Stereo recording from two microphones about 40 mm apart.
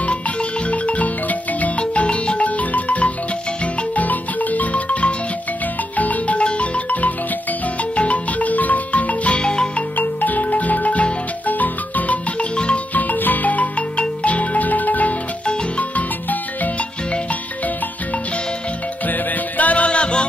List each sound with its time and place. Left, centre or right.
0.0 s marimba: left
1.8 s marimba: left
9.4 s music: left
9.9 s marimba: left
12.5 s marimba: left
12.9 s marimba: left
15.8 s music: left
19.0 s music: left